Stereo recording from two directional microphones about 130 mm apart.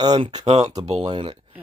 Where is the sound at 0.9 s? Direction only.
45° right (ahead or behind).